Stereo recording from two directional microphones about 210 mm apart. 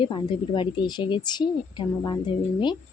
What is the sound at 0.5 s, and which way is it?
Speech, 20° left (ahead or behind).